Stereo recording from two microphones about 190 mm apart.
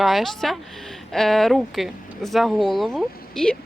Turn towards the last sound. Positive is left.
turn(degrees=5)  # may be behind; listen again after turning